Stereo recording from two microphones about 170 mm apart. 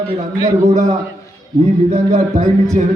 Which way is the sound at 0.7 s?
40° right (ahead or behind).